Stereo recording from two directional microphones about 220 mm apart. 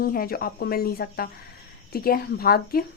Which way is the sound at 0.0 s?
40° left (ahead or behind).